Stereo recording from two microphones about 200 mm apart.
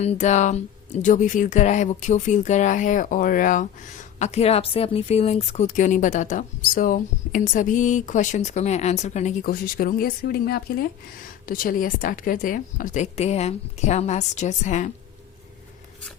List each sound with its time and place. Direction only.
0.0 s speech: 35° left (ahead or behind)